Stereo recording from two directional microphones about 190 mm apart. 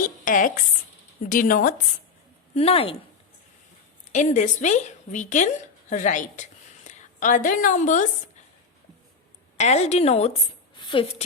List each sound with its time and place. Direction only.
0.0 s a sound: 45° left (ahead or behind)
1.2 s speech: 45° left (ahead or behind)
2.6 s a woman's voice: 30° left (ahead or behind)
4.1 s a woman's voice: 40° left (ahead or behind)
9.6 s a woman's voice: 35° left (ahead or behind)
10.8 s a sound: 25° left (ahead or behind)